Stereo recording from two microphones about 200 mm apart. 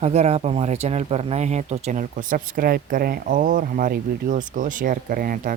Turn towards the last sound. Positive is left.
turn(degrees=-45)  # may be behind; listen again after turning